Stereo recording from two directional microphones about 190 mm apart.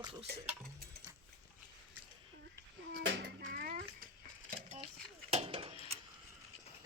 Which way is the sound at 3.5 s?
50° right (ahead or behind).